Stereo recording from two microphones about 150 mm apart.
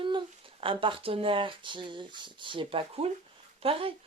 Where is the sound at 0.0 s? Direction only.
35° right (ahead or behind).